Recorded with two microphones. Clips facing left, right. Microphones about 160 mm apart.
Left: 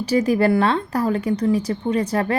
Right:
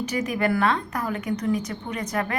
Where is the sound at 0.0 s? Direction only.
30° left (ahead or behind).